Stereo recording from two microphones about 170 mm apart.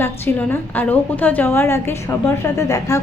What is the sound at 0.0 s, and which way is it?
A woman's voice, 10° left (ahead or behind).